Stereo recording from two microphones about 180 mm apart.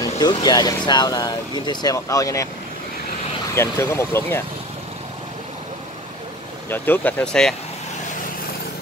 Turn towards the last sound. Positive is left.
turn(degrees=5)  # may be behind; listen again after turning